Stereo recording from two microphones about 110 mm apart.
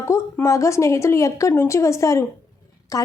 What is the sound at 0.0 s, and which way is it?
Speech, 25° left (ahead or behind).